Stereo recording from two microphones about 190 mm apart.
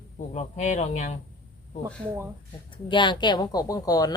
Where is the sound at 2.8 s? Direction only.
25° left (ahead or behind).